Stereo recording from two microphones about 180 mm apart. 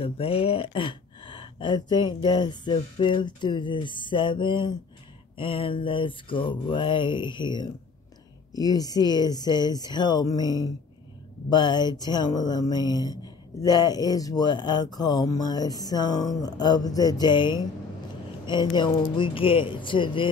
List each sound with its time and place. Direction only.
0.0 s speech: 30° left (ahead or behind)